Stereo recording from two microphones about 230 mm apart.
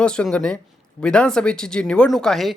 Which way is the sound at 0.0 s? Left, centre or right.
Centre.